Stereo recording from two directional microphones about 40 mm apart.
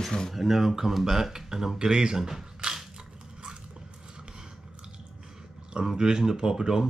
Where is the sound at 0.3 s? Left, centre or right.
Centre.